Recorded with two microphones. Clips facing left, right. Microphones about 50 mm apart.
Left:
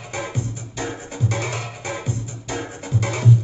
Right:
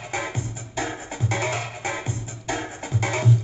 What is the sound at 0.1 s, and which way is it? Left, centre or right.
Music, right.